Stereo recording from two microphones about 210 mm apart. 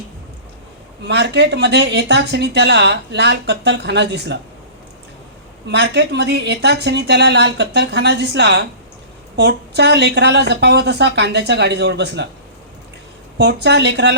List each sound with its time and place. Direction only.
1.0 s speech: 55° right (ahead or behind)
5.6 s a woman's voice: 55° right (ahead or behind)
13.4 s a woman's voice: 55° right (ahead or behind)